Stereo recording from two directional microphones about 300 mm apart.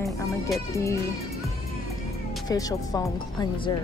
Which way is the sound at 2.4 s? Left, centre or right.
Centre.